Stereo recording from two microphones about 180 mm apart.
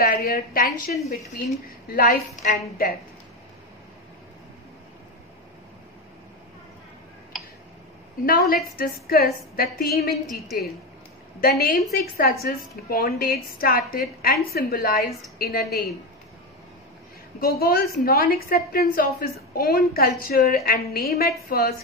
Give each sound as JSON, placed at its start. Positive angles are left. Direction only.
{"t": 0.0, "sound": "a woman's voice", "side_deg": 55}
{"t": 8.3, "sound": "a woman's voice", "side_deg": 55}
{"t": 11.4, "sound": "a woman's voice", "side_deg": 55}
{"t": 17.4, "sound": "a woman's voice", "side_deg": 55}